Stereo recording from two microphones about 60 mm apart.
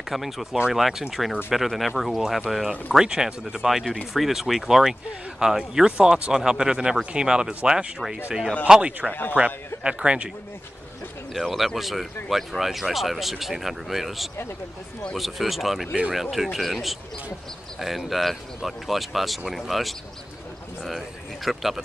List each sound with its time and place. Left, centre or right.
0.1 s a man's voice: centre
11.3 s speech: centre
21.5 s speech: centre